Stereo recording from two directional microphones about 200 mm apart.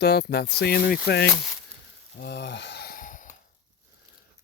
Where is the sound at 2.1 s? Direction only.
55° left (ahead or behind); by 3.3 s 40° left (ahead or behind).